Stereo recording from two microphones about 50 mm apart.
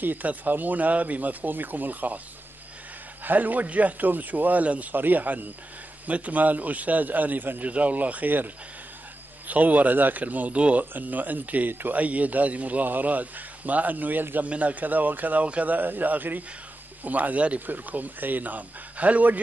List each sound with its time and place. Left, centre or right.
0.0 s a man's voice: right
3.3 s a man's voice: right
9.5 s a man's voice: right